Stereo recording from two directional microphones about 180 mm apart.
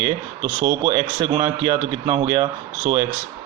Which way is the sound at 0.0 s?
30° right (ahead or behind).